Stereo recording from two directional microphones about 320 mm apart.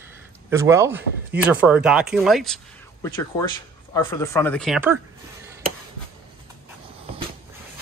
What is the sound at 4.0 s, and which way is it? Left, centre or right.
Speech, centre.